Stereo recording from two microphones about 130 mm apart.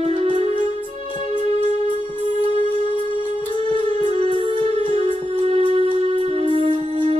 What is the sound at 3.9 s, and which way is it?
Music, 50° right (ahead or behind).